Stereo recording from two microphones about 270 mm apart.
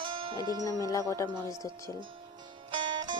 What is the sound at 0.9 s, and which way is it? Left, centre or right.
Speech, centre.